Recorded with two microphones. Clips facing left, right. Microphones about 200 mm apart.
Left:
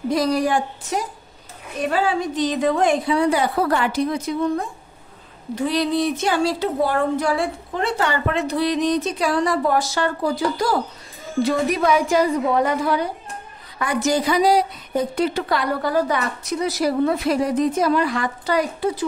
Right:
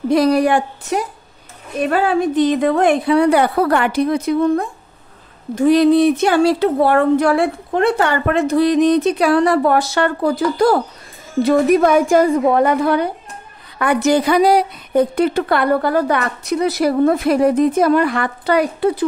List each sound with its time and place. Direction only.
0.1 s speech: 65° right (ahead or behind)
5.5 s a woman's voice: 50° right (ahead or behind)